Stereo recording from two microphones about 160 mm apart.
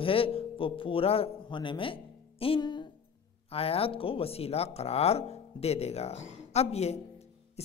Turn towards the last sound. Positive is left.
turn(degrees=40)  # may be behind; listen again after turning